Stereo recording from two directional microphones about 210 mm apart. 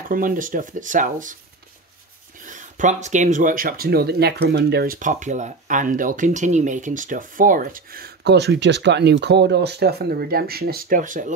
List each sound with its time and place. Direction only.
0.1 s speech: 40° right (ahead or behind)
2.4 s speech: 35° right (ahead or behind)